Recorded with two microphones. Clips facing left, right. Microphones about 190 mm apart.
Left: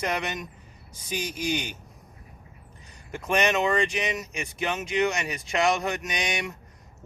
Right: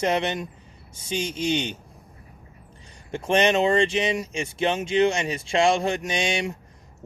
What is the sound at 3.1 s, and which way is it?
Speech, 30° right (ahead or behind).